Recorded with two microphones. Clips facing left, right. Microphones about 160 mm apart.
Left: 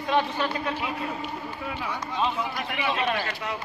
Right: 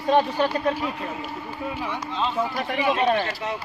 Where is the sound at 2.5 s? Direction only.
40° right (ahead or behind).